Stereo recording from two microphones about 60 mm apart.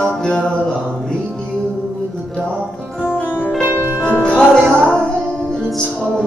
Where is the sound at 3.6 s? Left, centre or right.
Right.